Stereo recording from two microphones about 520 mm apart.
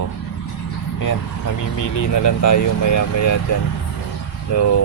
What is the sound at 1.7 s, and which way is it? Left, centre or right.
Speech, left.